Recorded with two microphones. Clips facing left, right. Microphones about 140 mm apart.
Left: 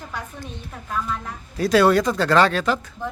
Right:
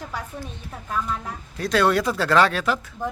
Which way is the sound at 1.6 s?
5° left (ahead or behind).